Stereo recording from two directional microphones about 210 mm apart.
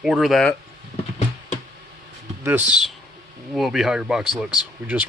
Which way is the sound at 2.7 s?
Centre (ahead or behind).